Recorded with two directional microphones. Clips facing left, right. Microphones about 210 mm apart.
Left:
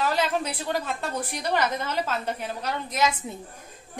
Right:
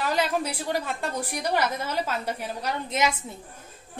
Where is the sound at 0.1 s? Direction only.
10° right (ahead or behind).